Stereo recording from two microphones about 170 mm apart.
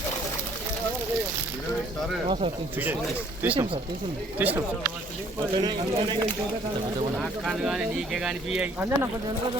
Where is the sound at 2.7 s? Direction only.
10° right (ahead or behind).